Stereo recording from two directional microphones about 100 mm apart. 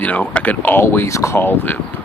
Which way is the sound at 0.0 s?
15° left (ahead or behind).